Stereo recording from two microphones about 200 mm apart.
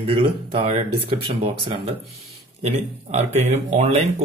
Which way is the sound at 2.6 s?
35° right (ahead or behind).